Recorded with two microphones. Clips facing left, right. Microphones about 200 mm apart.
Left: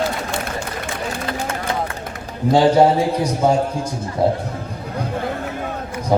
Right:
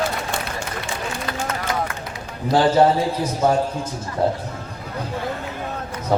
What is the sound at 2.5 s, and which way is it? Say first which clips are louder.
A man's voice: left 2 dB; 15° left (ahead or behind).